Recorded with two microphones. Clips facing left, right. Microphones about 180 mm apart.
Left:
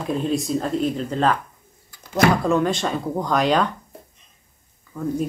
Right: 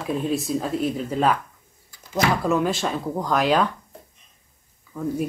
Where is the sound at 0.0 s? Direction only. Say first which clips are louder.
Left 2 dB; 5° right (ahead or behind).